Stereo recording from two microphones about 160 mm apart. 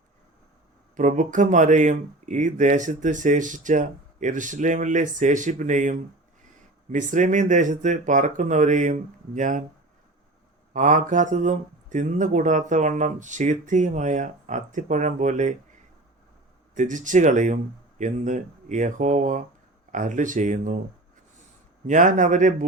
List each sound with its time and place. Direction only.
0.9 s speech: 50° right (ahead or behind)
10.8 s speech: 55° right (ahead or behind)
16.7 s speech: 50° right (ahead or behind)
21.8 s speech: 50° right (ahead or behind)